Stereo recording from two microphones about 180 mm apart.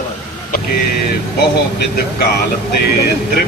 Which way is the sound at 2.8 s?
60° left (ahead or behind).